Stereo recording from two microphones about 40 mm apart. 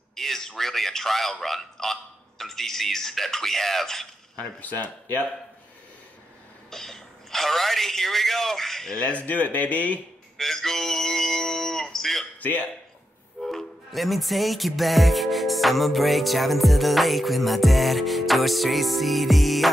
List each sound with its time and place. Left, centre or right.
0.1 s a man's voice: centre
4.6 s speech: left
6.7 s speech: centre
8.9 s speech: left
10.3 s a sound: centre
12.4 s a man's voice: left
13.4 s music: centre